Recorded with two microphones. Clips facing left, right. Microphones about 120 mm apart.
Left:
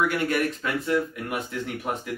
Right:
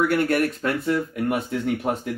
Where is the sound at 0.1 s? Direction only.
50° right (ahead or behind).